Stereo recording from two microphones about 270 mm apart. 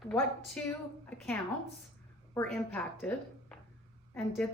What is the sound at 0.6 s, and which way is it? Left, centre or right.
A woman's voice, centre.